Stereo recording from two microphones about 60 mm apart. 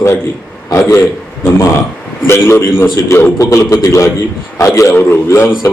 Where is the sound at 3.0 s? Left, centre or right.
Left.